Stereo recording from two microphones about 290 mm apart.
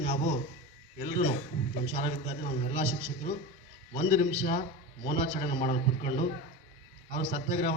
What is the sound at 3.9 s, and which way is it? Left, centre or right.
A man's voice, left.